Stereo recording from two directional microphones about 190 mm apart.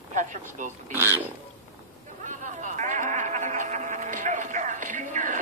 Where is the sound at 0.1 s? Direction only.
40° right (ahead or behind).